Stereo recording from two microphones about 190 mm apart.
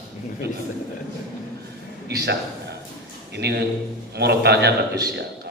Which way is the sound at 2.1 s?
60° right (ahead or behind).